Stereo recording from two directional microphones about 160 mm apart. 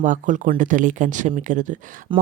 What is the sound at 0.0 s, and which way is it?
A woman's voice, 55° right (ahead or behind).